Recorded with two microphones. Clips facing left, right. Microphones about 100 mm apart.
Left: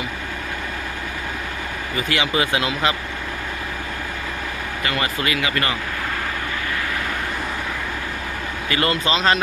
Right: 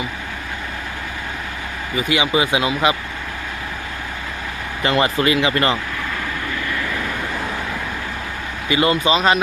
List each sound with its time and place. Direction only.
2.0 s speech: 15° right (ahead or behind)
4.8 s speech: 30° right (ahead or behind)
8.7 s speech: 15° right (ahead or behind)